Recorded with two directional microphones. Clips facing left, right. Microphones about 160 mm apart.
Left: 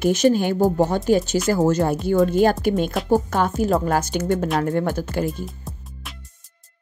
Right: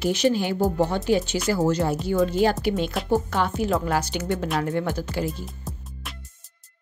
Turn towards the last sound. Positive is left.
turn(degrees=50)  # may be behind; listen again after turning